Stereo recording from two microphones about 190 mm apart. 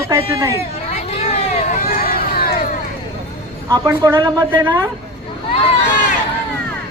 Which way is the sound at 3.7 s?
15° right (ahead or behind).